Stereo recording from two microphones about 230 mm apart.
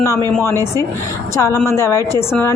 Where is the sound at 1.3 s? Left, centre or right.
Centre.